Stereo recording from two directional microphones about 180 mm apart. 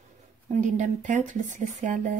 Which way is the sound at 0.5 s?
40° right (ahead or behind).